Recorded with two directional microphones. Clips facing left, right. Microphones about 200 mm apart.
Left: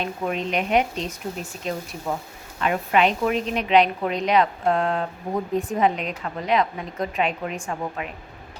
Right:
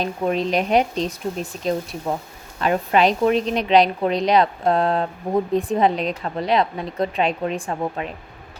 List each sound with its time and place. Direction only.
0.0 s a woman's voice: 35° right (ahead or behind)